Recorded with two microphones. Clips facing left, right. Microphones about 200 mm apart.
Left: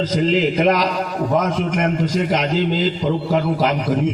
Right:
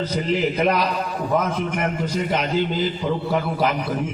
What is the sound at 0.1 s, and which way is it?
A man's voice, 90° left.